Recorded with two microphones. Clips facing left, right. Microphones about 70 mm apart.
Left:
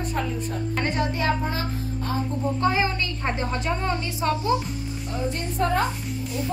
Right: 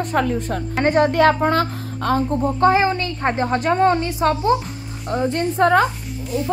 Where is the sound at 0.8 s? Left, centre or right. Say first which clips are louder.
Right 11 dB; right.